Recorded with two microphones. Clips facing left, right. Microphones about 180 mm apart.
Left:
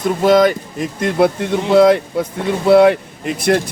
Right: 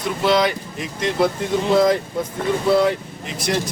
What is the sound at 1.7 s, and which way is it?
Speech, 65° left (ahead or behind).